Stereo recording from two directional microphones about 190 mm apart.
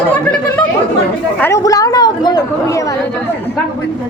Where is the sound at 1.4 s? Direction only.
15° left (ahead or behind).